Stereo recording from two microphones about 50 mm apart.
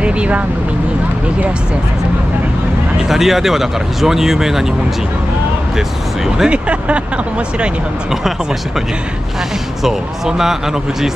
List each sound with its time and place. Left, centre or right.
0.0 s vehicle: right
3.0 s speech: centre
5.8 s speech: centre
6.5 s speech: right
9.8 s speech: centre